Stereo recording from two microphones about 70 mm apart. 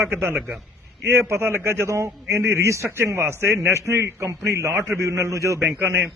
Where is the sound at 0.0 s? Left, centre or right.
Right.